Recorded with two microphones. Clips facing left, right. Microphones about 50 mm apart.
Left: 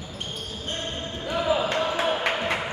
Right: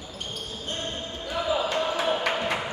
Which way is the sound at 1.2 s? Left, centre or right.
Centre.